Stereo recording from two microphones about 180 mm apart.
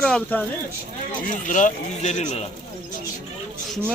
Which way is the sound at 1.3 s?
45° left (ahead or behind).